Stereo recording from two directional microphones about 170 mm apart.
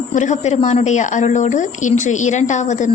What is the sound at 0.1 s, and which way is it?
A woman's voice, 45° left (ahead or behind).